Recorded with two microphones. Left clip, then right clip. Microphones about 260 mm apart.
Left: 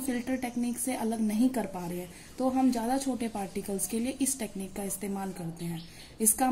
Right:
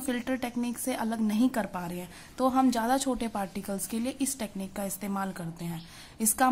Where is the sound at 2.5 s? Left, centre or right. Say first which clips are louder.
Right 2 dB; right.